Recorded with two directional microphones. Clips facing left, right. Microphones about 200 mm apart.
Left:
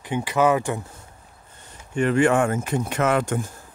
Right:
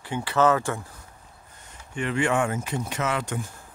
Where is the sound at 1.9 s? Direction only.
45° left (ahead or behind).